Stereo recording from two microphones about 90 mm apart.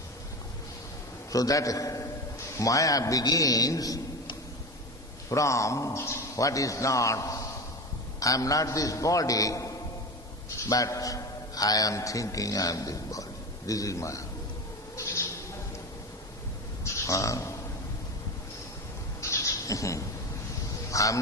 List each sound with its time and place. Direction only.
1.3 s a man's voice: 40° left (ahead or behind)
5.3 s a man's voice: 35° left (ahead or behind)
14.9 s owl: 35° left (ahead or behind)
16.8 s a sound: 35° left (ahead or behind)
19.2 s bird: 35° left (ahead or behind)
20.9 s speech: 35° left (ahead or behind)